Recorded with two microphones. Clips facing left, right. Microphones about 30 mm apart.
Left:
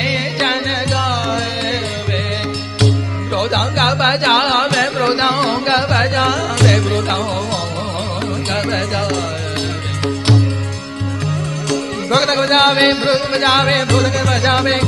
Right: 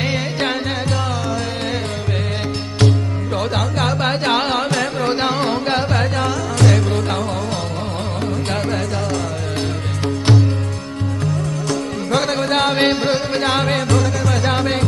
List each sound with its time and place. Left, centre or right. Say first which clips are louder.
0.0 s music: left 3 dB; left
3.3 s music: left 5 dB; left
10.0 s music: left 1 dB; left
12.1 s music: left 5 dB; left
12.7 s music: left 3 dB; left
13.1 s music: left 4 dB; left